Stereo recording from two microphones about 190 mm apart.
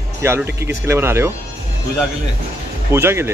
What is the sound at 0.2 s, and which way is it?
Speech, 10° right (ahead or behind).